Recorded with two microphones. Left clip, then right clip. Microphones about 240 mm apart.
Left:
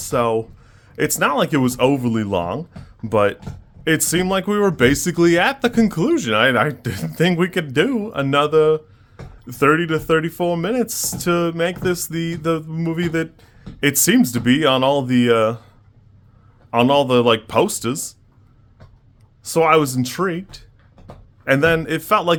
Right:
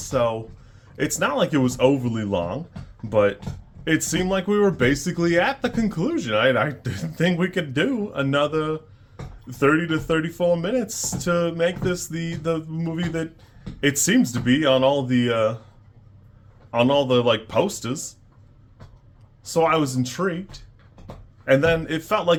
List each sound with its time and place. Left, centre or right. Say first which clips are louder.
0.1 s speech: left 4 dB; left
16.7 s speech: left 4 dB; left
19.5 s speech: left 5 dB; left